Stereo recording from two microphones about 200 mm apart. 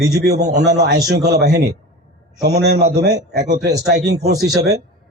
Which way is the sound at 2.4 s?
55° right (ahead or behind).